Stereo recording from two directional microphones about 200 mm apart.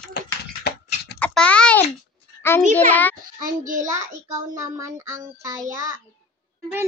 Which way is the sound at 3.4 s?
40° right (ahead or behind).